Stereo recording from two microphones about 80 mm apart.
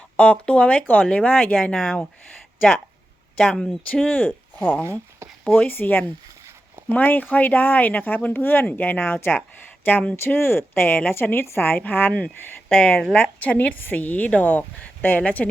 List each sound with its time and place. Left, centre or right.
0.2 s speech: centre
1.7 s speech: centre